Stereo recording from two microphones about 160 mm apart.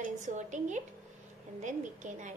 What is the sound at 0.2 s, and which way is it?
A woman's voice, 50° right (ahead or behind).